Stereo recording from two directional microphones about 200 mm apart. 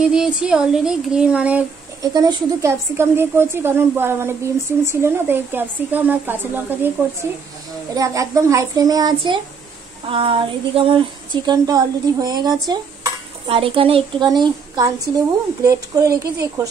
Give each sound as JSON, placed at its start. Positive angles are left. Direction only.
{"t": 0.0, "sound": "speech", "side_deg": -5}
{"t": 2.0, "sound": "a woman's voice", "side_deg": -20}
{"t": 10.0, "sound": "stir", "side_deg": -25}